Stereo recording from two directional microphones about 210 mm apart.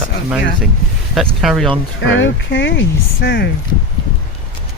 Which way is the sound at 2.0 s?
60° left (ahead or behind).